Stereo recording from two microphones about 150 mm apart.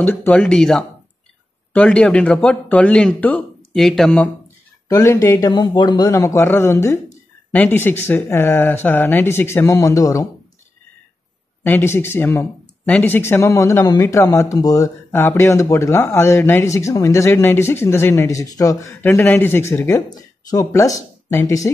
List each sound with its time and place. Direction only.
0.0 s speech: 15° left (ahead or behind)
4.8 s speech: 20° left (ahead or behind)
11.6 s speech: 15° left (ahead or behind)